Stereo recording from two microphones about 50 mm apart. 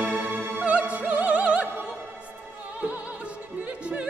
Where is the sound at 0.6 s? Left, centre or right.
Right.